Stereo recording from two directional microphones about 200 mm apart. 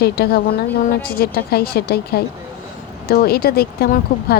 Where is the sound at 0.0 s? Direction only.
50° left (ahead or behind).